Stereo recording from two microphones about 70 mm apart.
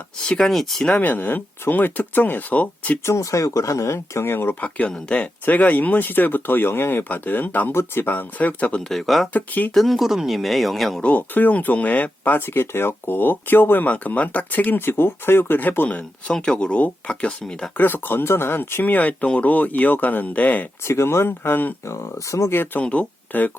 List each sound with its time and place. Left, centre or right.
0.3 s speech: centre
0.9 s speech: left
3.0 s speech: left
4.6 s speech: centre
8.8 s speech: centre
9.3 s speech: left
9.7 s speech: centre
11.0 s speech: left
17.7 s speech: left
20.8 s speech: left
21.8 s speech: left
22.5 s speech: left
22.8 s speech: centre